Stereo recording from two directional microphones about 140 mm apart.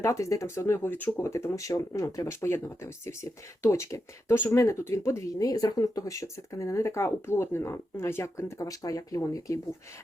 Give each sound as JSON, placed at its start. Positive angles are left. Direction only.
{"t": 0.0, "sound": "speech", "side_deg": 20}